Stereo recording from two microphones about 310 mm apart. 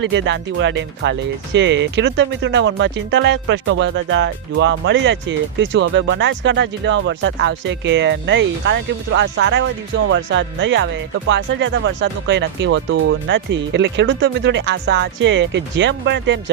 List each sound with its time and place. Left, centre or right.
0.0 s speech: right